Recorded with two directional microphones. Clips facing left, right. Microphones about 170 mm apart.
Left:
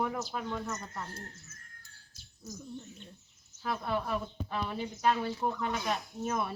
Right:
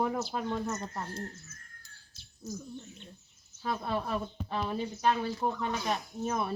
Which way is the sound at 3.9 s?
25° right (ahead or behind).